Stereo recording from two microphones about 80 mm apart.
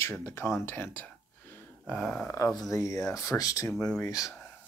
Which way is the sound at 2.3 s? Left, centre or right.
Left.